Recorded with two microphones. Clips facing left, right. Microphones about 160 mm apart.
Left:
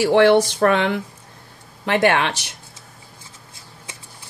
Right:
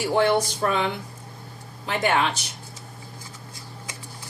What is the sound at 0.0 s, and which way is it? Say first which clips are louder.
Speech: left 7 dB; 75° left (ahead or behind).